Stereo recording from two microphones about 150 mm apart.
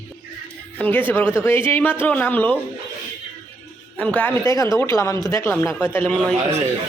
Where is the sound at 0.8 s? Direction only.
10° left (ahead or behind).